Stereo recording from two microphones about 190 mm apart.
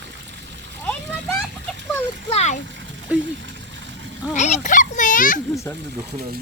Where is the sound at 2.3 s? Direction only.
35° left (ahead or behind).